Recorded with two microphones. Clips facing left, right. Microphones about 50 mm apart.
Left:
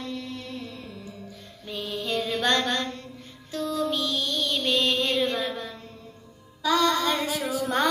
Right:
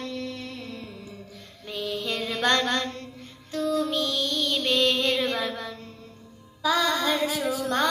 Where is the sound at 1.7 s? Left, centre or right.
Right.